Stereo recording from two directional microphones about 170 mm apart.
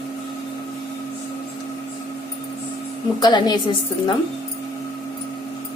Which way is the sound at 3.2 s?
25° left (ahead or behind).